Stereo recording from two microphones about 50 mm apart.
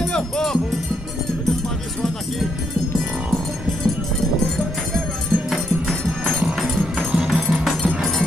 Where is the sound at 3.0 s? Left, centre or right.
Centre.